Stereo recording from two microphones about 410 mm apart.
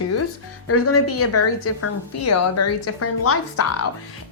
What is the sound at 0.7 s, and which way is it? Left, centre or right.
Speech, left.